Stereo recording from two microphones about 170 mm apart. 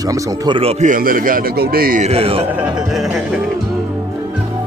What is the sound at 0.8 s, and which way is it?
A man's voice, 55° right (ahead or behind).